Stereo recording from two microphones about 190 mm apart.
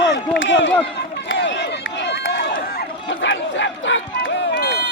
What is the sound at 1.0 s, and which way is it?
Run, 70° left (ahead or behind).